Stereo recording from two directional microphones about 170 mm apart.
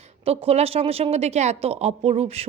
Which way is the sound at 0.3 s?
35° right (ahead or behind).